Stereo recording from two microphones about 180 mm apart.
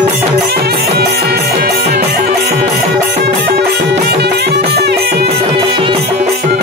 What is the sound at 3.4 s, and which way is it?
Music, 65° right (ahead or behind).